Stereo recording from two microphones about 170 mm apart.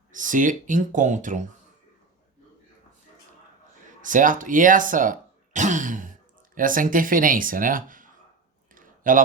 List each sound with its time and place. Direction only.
0.1 s speech: 50° right (ahead or behind)
4.0 s speech: 50° right (ahead or behind)
8.7 s a sound: 50° right (ahead or behind)